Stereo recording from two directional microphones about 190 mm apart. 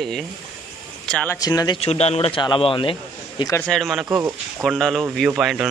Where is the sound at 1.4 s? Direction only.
20° left (ahead or behind).